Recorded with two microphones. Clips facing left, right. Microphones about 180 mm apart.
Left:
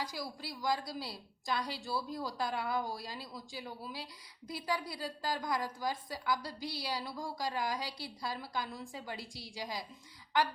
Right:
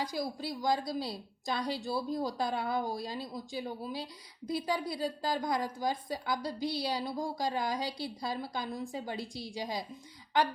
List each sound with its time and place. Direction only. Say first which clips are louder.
0.0 s a woman's voice: right 6 dB; 20° right (ahead or behind)